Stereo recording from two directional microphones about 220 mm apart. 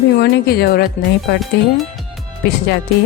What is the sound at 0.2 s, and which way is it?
Speech, 45° left (ahead or behind).